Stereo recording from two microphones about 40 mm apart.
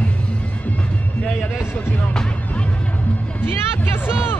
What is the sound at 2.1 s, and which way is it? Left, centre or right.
Music, centre.